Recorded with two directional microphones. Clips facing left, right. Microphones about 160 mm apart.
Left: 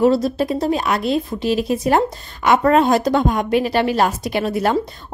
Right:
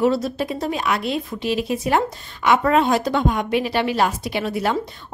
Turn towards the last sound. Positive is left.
turn(degrees=45)  # may be behind; listen again after turning